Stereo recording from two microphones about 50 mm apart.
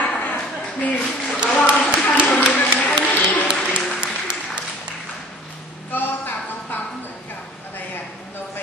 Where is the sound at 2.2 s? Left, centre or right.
Left.